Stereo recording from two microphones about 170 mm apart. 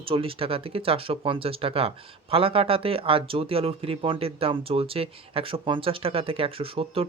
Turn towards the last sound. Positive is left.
turn(degrees=-35)  # may be behind; listen again after turning